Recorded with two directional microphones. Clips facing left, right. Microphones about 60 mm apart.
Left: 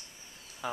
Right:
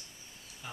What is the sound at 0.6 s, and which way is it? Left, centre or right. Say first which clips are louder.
Speech: left 10 dB; left.